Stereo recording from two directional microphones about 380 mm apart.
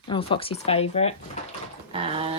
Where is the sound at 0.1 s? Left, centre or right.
Centre.